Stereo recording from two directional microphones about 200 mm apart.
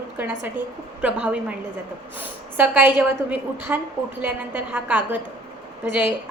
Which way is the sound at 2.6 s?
10° right (ahead or behind).